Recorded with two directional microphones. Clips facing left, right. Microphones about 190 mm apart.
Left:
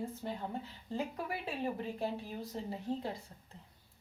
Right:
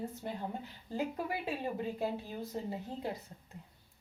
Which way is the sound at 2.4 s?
20° right (ahead or behind).